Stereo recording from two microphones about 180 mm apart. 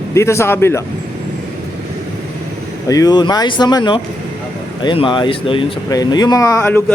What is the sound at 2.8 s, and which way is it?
Speech, 20° left (ahead or behind).